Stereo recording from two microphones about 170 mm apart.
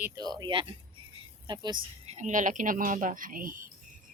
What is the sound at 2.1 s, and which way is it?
Speech, 45° right (ahead or behind).